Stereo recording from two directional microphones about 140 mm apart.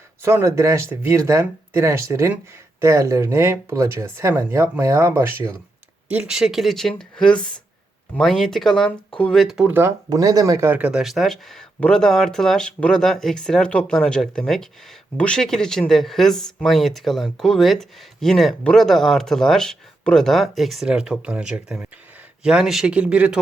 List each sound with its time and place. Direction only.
0.2 s speech: 20° right (ahead or behind)
10.1 s speech: 25° right (ahead or behind); by 23.4 s 10° right (ahead or behind)